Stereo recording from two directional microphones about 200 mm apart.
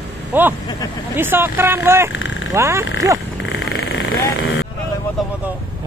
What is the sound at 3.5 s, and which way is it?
Vehicle, 55° left (ahead or behind).